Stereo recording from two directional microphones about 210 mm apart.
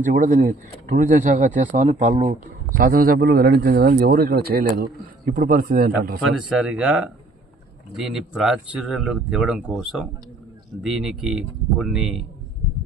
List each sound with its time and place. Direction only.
0.0 s speech: 40° right (ahead or behind)
6.3 s speech: centre (ahead or behind)